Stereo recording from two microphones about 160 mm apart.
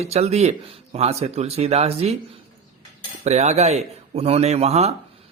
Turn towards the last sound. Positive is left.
turn(degrees=-40)  # may be behind; listen again after turning